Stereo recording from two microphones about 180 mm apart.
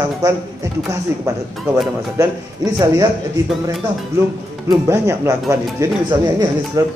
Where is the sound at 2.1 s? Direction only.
20° right (ahead or behind).